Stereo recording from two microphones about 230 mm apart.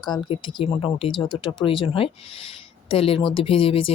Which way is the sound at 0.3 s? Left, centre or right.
Left.